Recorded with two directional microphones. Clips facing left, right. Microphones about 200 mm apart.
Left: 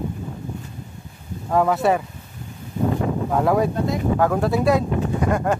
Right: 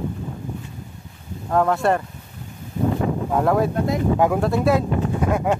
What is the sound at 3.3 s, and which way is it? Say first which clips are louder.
Speech: even; centre (ahead or behind).